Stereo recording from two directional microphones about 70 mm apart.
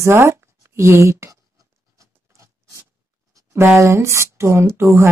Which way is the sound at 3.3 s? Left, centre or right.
Right.